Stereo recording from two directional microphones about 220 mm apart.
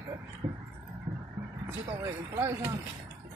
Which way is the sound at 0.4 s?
30° right (ahead or behind).